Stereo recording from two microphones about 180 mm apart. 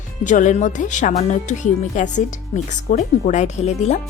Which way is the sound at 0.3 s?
45° left (ahead or behind).